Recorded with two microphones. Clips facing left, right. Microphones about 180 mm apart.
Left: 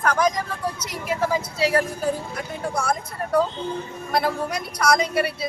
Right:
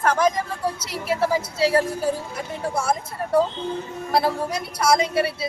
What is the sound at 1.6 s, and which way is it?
Speech, 30° right (ahead or behind).